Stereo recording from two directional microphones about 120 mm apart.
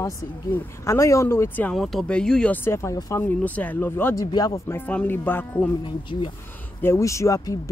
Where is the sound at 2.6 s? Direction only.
25° left (ahead or behind).